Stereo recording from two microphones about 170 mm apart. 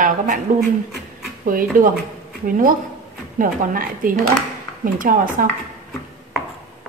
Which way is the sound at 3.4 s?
55° right (ahead or behind).